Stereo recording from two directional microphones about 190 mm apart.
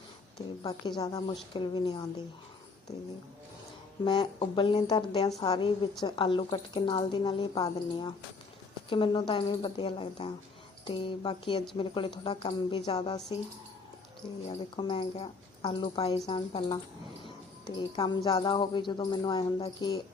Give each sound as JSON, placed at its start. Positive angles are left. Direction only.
{"t": 0.6, "sound": "speech", "side_deg": 20}
{"t": 4.0, "sound": "speech", "side_deg": 25}
{"t": 14.4, "sound": "speech", "side_deg": 30}
{"t": 16.5, "sound": "speech", "side_deg": 35}